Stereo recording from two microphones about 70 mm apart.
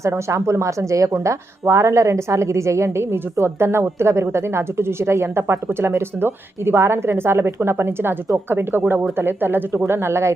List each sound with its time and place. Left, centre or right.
0.3 s a woman's voice: right